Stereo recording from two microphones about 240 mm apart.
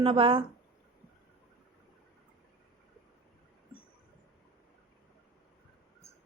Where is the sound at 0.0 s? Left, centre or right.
Right.